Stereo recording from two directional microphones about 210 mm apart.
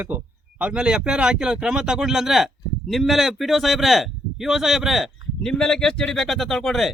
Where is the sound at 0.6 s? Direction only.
5° right (ahead or behind).